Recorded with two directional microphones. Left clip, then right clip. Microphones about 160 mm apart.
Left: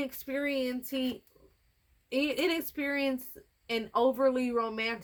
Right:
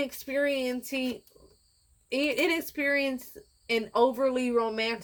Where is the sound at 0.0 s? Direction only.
30° left (ahead or behind).